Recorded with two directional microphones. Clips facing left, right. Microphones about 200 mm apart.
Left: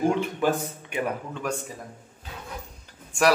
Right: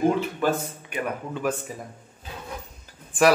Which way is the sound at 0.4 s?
20° left (ahead or behind).